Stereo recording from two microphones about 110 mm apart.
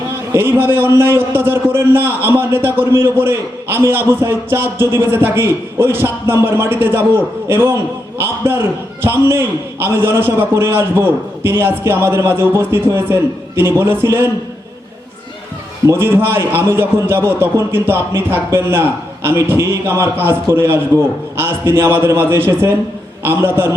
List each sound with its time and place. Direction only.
0.3 s a man's voice: 20° right (ahead or behind)
15.9 s a man's voice: 20° right (ahead or behind)